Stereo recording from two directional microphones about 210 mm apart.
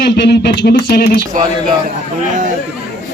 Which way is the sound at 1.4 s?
40° right (ahead or behind).